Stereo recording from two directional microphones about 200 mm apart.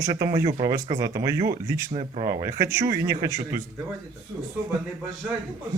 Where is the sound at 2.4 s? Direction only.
15° right (ahead or behind).